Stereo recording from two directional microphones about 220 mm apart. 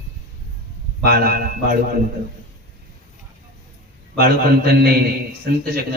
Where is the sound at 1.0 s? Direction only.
45° right (ahead or behind).